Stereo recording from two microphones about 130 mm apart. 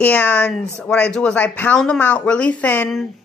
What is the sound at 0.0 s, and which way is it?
Speech, 10° left (ahead or behind).